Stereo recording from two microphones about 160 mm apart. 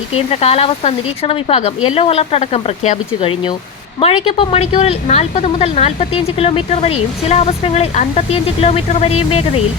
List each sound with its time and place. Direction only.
0.1 s a woman's voice: 40° left (ahead or behind)